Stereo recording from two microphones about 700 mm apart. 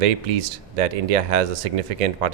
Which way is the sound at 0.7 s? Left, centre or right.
Right.